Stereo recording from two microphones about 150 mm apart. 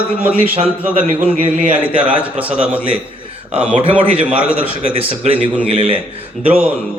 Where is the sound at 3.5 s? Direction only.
45° right (ahead or behind).